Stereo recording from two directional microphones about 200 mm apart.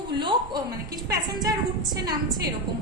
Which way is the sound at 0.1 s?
20° right (ahead or behind).